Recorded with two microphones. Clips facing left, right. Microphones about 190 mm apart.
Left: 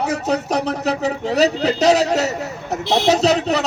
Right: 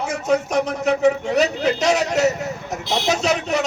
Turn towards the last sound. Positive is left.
turn(degrees=35)  # may be behind; listen again after turning